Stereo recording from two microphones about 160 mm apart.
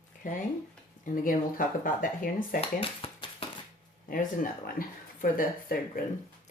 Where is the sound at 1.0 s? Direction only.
60° left (ahead or behind).